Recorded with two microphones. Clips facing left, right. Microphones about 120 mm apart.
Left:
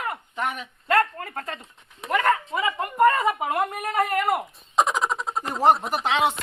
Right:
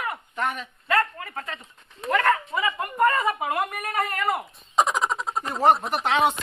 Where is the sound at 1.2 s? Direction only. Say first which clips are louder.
Left 2 dB; 45° left (ahead or behind).